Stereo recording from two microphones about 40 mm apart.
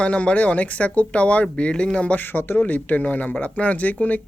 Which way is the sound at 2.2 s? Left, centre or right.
Left.